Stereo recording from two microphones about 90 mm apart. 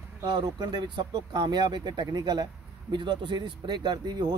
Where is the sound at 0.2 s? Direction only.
50° right (ahead or behind).